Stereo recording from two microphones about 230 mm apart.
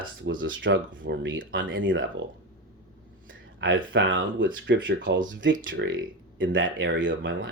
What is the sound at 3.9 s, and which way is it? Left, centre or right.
Speech, right.